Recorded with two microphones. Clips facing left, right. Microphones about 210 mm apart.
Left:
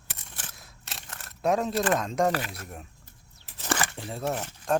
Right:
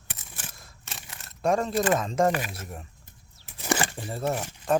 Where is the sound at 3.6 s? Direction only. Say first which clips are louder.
Right 3 dB; 15° right (ahead or behind).